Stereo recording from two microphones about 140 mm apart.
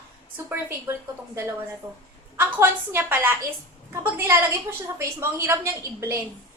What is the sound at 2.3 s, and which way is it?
A woman's voice, 15° right (ahead or behind).